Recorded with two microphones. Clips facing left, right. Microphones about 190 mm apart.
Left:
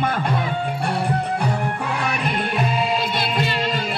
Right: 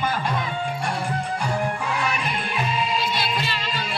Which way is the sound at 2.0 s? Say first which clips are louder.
Left 3 dB; 60° left (ahead or behind).